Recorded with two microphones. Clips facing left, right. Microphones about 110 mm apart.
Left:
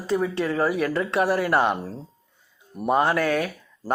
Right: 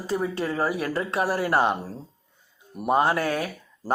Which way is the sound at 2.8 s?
25° right (ahead or behind).